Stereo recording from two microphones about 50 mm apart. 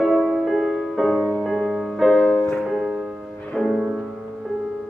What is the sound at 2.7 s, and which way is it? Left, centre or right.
Music, centre.